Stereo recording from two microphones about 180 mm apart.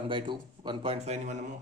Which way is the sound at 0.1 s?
25° right (ahead or behind).